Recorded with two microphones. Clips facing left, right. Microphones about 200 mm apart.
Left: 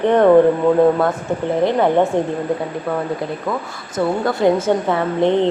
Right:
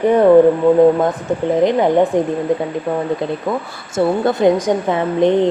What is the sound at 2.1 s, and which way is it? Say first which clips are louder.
Speech: right 2 dB; 15° right (ahead or behind).